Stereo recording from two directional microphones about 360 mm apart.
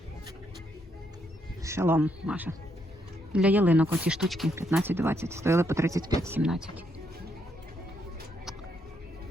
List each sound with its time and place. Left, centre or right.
1.6 s speech: centre